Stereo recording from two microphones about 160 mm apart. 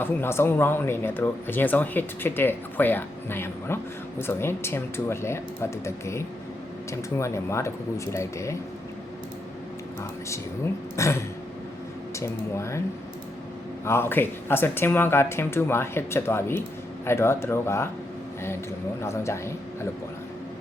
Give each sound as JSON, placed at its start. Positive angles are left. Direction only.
{"t": 0.0, "sound": "speech", "side_deg": 15}
{"t": 10.0, "sound": "speech", "side_deg": 20}
{"t": 12.2, "sound": "speech", "side_deg": 20}
{"t": 13.8, "sound": "speech", "side_deg": 15}
{"t": 19.0, "sound": "speech", "side_deg": 15}